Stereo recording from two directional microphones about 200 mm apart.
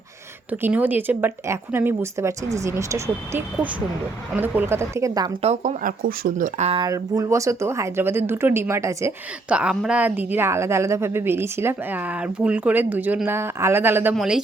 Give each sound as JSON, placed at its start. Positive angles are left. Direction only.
{"t": 0.5, "sound": "speech", "side_deg": -10}
{"t": 5.4, "sound": "speech", "side_deg": -35}
{"t": 6.7, "sound": "speech", "side_deg": -15}